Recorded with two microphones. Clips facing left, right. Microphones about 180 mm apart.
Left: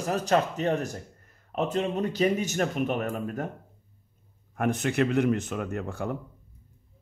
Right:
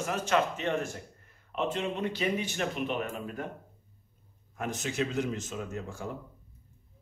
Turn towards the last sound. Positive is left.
turn(degrees=60)  # may be behind; listen again after turning